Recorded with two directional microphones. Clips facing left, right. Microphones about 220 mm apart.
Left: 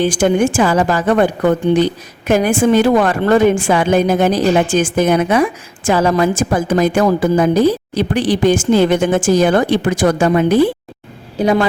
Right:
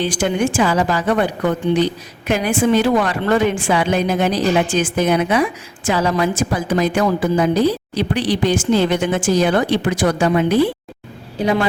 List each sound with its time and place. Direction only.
0.0 s a woman's voice: 50° left (ahead or behind)